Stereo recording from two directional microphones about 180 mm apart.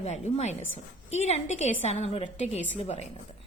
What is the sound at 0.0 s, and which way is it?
A woman's voice, 40° left (ahead or behind).